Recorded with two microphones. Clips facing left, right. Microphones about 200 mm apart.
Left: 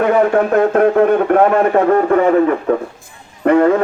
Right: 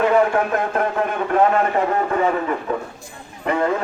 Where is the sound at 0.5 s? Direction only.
60° left (ahead or behind).